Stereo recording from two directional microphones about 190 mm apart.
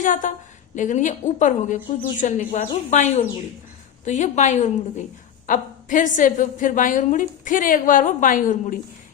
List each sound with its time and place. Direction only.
0.0 s a woman's voice: 45° left (ahead or behind)